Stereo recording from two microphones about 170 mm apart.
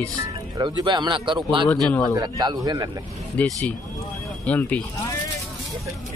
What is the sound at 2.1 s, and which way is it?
Speech, 25° right (ahead or behind).